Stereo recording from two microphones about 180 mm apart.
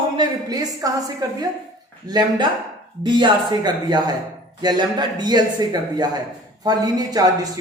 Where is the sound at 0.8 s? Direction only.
20° right (ahead or behind).